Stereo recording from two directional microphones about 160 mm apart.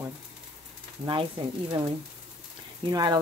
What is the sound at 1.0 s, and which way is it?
Speech, 30° right (ahead or behind).